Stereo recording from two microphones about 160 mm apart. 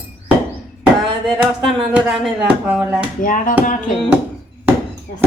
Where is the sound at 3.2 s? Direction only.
55° left (ahead or behind).